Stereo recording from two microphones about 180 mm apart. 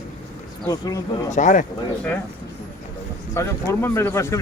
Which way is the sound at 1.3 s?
45° left (ahead or behind).